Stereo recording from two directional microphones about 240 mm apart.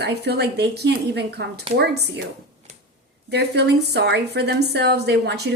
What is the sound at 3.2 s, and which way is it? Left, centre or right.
A woman's voice, right.